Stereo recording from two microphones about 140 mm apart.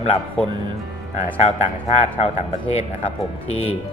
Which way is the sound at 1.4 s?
50° left (ahead or behind).